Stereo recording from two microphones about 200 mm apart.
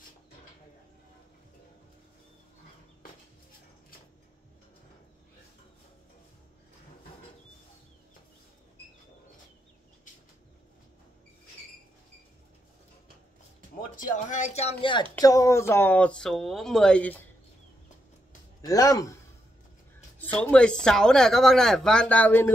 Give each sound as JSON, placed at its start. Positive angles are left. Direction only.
{"t": 13.9, "sound": "a woman's voice", "side_deg": 40}
{"t": 18.7, "sound": "speech", "side_deg": 15}
{"t": 20.3, "sound": "speech", "side_deg": 5}